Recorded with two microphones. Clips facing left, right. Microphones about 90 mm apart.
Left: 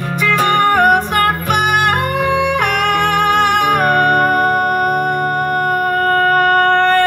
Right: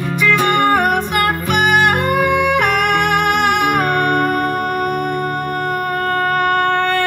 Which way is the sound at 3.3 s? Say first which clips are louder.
Left 2 dB; 50° left (ahead or behind).